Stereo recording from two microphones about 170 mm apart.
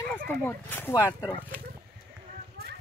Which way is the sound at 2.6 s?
65° right (ahead or behind).